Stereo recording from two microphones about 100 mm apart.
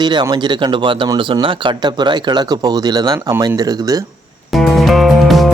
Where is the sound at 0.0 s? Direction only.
45° right (ahead or behind).